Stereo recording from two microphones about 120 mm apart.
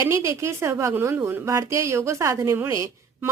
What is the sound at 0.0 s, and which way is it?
A woman's voice, 25° right (ahead or behind).